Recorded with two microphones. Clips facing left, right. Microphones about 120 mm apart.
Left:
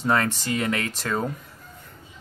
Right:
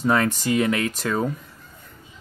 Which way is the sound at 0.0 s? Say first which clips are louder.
Right 3 dB; 10° right (ahead or behind).